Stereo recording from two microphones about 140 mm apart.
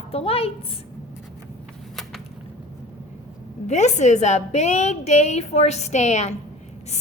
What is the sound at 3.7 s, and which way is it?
A woman's voice, 55° left (ahead or behind).